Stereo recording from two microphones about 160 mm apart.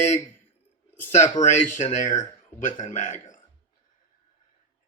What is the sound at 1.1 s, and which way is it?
Speech, 50° left (ahead or behind).